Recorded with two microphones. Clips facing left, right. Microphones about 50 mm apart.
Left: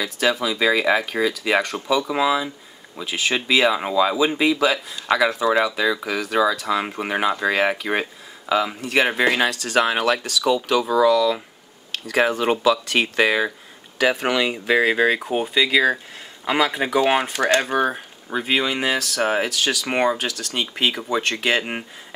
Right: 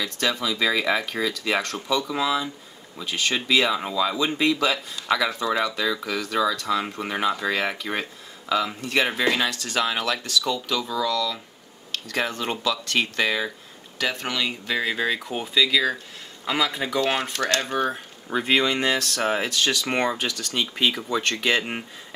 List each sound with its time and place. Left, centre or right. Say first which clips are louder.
0.0 s speech: left 4 dB; centre
9.1 s speech: left 4 dB; centre
9.5 s speech: left 4 dB; centre
9.8 s speech: left 6 dB; centre
18.3 s speech: even; centre